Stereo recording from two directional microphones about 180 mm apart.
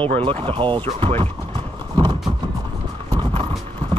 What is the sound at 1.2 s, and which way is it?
Clip-clop, 30° right (ahead or behind).